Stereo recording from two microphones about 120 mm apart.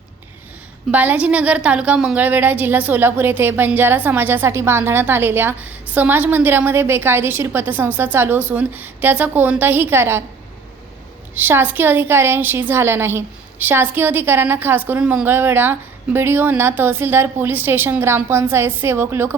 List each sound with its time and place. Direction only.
0.9 s a woman's voice: 10° right (ahead or behind)
11.3 s a woman's voice: 15° right (ahead or behind)